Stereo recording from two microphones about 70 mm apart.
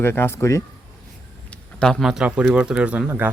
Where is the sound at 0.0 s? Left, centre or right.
Left.